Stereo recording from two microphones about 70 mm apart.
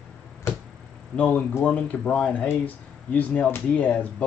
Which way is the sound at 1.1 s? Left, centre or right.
Left.